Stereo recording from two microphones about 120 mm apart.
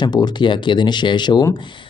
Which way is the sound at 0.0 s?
40° left (ahead or behind).